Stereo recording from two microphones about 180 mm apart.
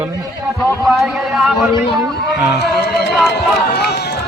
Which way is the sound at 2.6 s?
65° left (ahead or behind).